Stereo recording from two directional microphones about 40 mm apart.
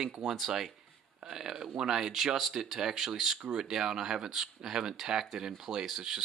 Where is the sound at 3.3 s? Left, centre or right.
Right.